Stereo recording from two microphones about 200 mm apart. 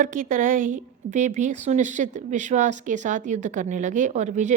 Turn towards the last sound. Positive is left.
turn(degrees=-35)  # may be behind; listen again after turning